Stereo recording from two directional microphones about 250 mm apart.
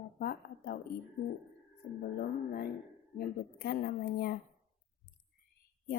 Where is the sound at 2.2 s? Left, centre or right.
Left.